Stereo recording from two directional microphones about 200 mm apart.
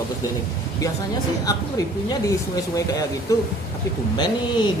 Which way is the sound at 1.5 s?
15° left (ahead or behind).